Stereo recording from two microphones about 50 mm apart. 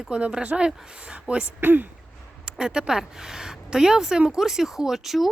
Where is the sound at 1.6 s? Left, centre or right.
Right.